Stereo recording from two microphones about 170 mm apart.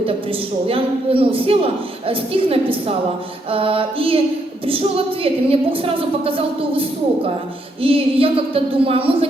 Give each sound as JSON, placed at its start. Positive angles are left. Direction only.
{"t": 0.0, "sound": "speech", "side_deg": -35}